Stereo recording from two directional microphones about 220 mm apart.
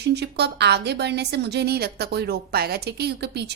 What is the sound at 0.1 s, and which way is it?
A woman's voice, 50° right (ahead or behind).